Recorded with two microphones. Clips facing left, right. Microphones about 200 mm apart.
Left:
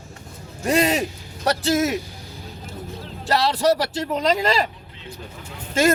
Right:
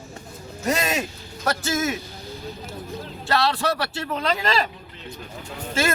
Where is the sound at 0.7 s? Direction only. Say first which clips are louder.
Left 5 dB; 30° left (ahead or behind).